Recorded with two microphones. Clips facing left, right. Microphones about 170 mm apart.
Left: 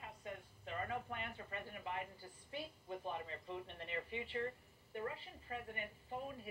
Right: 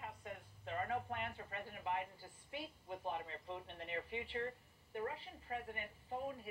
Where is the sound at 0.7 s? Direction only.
35° right (ahead or behind).